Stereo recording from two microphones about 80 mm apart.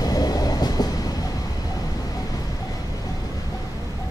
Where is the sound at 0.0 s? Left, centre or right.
Left.